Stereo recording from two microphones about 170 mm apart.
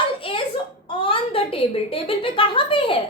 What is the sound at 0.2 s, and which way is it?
A woman's voice, 30° left (ahead or behind).